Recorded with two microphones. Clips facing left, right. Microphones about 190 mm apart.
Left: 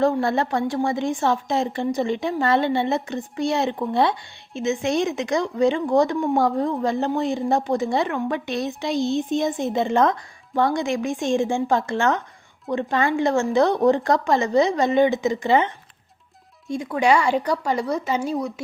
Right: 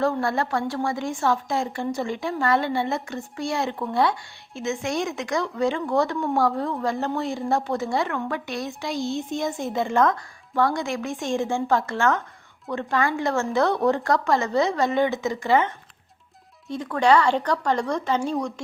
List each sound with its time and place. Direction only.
0.0 s a woman's voice: 20° left (ahead or behind)